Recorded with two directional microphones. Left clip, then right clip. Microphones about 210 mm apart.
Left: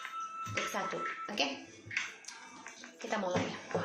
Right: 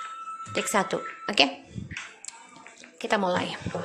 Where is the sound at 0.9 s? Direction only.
50° right (ahead or behind).